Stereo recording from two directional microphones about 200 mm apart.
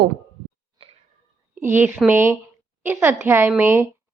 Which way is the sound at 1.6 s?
10° right (ahead or behind).